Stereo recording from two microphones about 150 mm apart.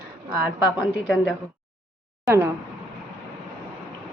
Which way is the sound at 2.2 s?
15° right (ahead or behind).